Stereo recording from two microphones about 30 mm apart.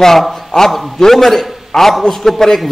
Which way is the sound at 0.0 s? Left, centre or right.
Centre.